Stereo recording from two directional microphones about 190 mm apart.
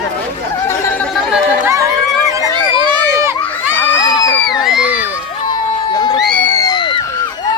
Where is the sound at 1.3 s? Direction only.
15° right (ahead or behind).